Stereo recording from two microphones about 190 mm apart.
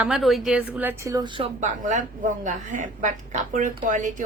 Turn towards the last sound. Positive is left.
turn(degrees=-40)  # may be behind; listen again after turning